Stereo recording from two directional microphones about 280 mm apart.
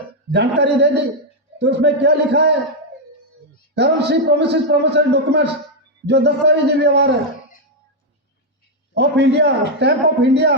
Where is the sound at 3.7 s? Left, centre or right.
Right.